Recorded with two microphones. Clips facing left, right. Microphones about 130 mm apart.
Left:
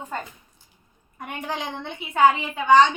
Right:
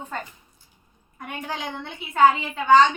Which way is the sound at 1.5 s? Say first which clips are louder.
Left 2 dB; 20° left (ahead or behind).